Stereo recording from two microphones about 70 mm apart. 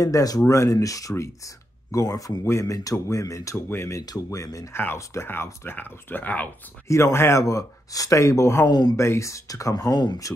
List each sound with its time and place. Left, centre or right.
0.0 s speech: left
3.5 s speech: left
4.0 s speech: left
4.9 s speech: left
6.9 s speech: left
7.4 s speech: left
8.6 s speech: left
8.9 s speech: left
9.9 s speech: left